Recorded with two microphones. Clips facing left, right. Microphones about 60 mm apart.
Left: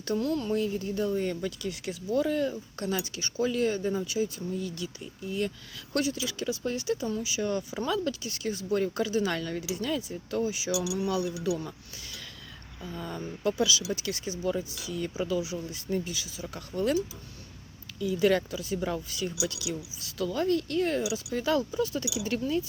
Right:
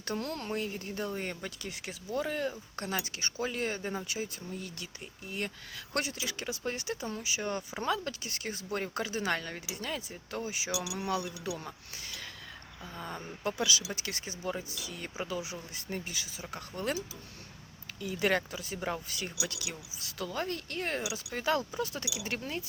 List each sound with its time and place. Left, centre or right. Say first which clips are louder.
0.0 s speech: left 7 dB; right
10.7 s speech: left 5 dB; right
12.8 s speech: left 5 dB; centre
13.6 s speech: left 5 dB; right
18.0 s speech: left 5 dB; right
19.1 s speech: left 6 dB; right
20.1 s speech: left 8 dB; right
21.0 s speech: left 5 dB; right